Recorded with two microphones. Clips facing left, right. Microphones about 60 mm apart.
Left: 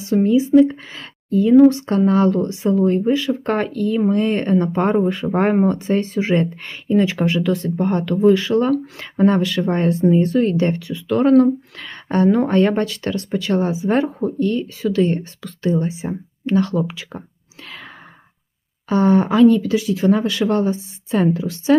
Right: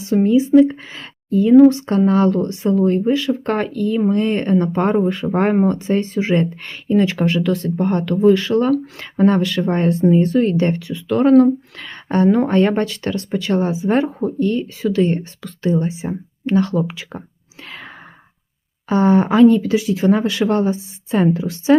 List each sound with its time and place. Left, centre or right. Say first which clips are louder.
0.2 s speech: right 1 dB; centre
17.7 s whispering: right 2 dB; centre
18.9 s a woman's voice: right 1 dB; centre